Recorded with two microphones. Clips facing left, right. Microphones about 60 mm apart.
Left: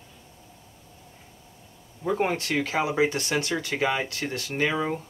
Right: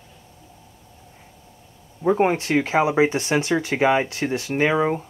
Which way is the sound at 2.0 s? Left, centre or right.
Right.